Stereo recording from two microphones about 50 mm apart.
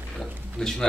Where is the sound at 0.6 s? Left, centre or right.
Centre.